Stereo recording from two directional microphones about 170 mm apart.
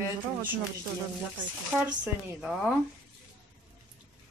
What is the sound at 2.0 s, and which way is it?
Speech, 5° right (ahead or behind).